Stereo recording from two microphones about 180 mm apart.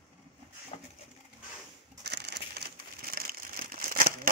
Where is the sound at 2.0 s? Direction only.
65° right (ahead or behind).